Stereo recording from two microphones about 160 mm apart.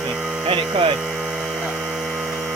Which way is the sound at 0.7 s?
30° right (ahead or behind).